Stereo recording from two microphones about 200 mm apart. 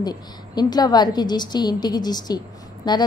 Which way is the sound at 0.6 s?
20° left (ahead or behind).